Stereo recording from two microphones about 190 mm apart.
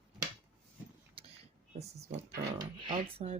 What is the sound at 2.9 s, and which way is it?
Speech, 30° right (ahead or behind).